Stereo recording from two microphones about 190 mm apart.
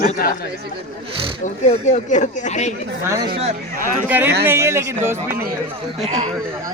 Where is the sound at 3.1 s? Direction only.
15° right (ahead or behind).